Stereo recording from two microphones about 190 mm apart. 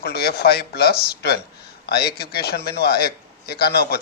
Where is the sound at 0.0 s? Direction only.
55° left (ahead or behind).